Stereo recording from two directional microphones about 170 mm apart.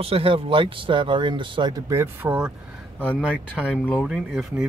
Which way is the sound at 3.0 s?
5° left (ahead or behind).